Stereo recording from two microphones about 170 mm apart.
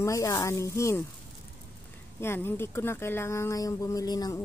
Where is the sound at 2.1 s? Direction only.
15° left (ahead or behind).